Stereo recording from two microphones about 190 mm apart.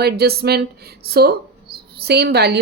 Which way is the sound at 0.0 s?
55° right (ahead or behind).